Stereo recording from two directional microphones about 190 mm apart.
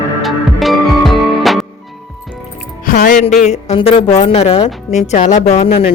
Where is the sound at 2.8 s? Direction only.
45° left (ahead or behind).